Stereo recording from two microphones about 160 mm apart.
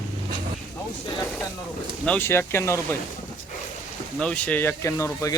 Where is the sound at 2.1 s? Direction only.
15° left (ahead or behind).